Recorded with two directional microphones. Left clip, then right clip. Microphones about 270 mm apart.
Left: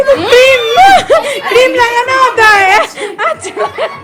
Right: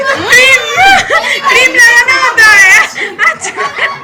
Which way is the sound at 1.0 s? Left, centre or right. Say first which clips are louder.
Even; centre.